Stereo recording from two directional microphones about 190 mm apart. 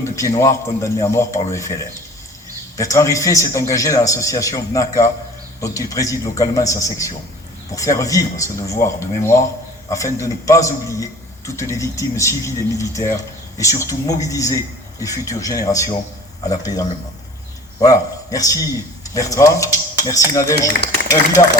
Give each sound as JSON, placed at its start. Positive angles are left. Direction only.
{"t": 0.3, "sound": "a man's voice", "side_deg": 15}
{"t": 17.8, "sound": "a man's voice", "side_deg": 20}
{"t": 21.4, "sound": "speech", "side_deg": 35}